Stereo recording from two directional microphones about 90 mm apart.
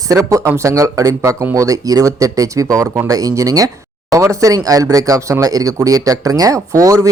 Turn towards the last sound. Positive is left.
turn(degrees=-40)  # may be behind; listen again after turning